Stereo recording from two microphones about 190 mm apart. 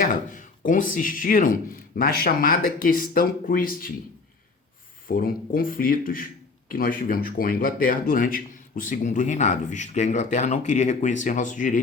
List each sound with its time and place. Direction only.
0.0 s speech: 45° left (ahead or behind)
5.0 s speech: 45° left (ahead or behind)